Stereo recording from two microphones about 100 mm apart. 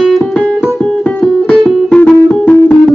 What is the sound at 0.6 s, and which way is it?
Music, centre (ahead or behind).